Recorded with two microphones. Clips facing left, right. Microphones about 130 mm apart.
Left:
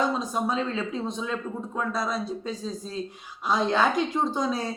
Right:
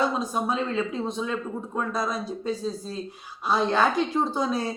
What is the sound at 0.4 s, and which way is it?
A woman's voice, 5° right (ahead or behind).